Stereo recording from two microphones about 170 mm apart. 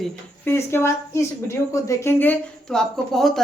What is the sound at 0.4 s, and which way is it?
A woman's voice, 15° left (ahead or behind).